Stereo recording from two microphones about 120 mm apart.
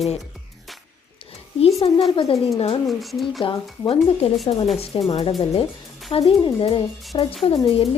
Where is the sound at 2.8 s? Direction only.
Centre (ahead or behind).